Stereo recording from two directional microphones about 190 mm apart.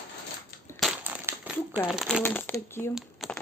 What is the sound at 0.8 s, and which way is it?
Crumpling, 5° right (ahead or behind).